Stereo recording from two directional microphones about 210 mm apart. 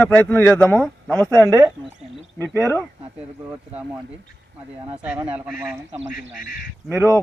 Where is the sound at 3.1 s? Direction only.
5° right (ahead or behind).